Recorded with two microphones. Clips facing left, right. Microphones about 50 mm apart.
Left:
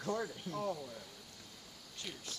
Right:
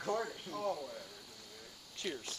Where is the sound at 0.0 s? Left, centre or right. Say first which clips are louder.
Right 1 dB; centre.